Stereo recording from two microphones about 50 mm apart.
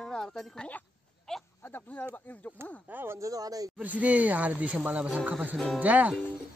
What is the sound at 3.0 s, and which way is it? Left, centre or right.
Speech, right.